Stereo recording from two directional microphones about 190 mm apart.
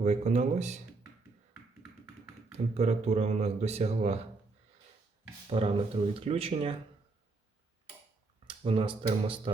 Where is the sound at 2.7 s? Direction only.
35° right (ahead or behind).